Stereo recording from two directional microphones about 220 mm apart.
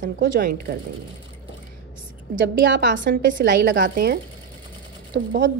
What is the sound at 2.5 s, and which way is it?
A woman's voice, 55° right (ahead or behind).